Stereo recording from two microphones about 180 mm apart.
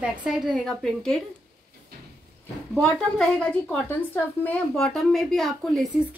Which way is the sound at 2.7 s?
5° left (ahead or behind).